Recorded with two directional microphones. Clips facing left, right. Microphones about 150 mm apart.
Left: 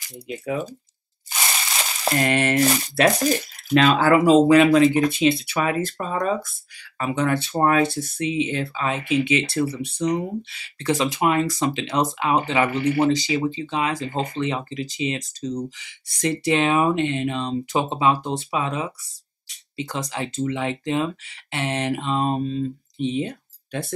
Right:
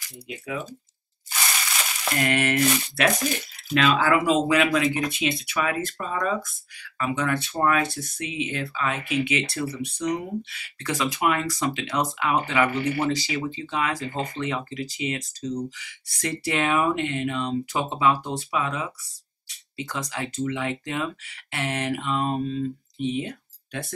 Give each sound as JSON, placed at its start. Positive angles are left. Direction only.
{"t": 1.3, "sound": "speech", "side_deg": 30}